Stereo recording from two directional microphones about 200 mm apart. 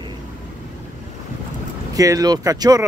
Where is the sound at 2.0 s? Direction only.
15° right (ahead or behind).